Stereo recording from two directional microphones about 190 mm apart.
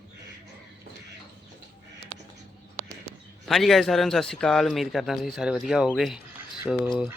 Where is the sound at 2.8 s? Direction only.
40° right (ahead or behind).